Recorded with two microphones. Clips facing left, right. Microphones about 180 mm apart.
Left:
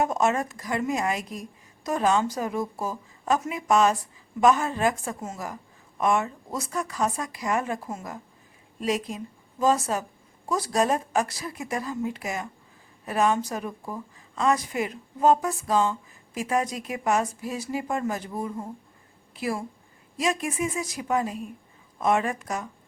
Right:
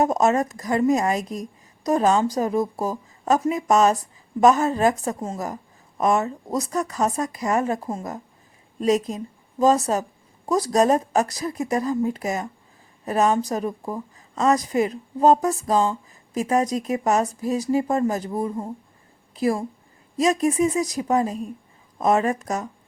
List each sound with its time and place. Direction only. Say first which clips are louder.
0.0 s a woman's voice: right 5 dB; 40° right (ahead or behind)